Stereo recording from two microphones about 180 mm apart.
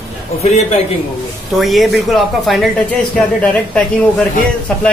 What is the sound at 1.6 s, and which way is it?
Speech, centre (ahead or behind).